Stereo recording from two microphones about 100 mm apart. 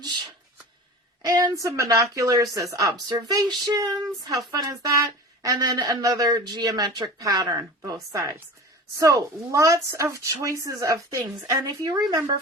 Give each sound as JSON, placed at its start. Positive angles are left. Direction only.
{"t": 1.3, "sound": "a woman's voice", "side_deg": -35}